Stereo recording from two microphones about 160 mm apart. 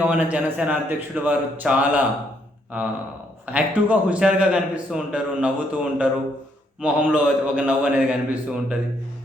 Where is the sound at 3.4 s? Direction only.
10° right (ahead or behind).